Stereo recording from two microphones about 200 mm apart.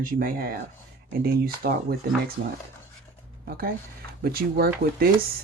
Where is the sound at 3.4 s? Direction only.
50° right (ahead or behind).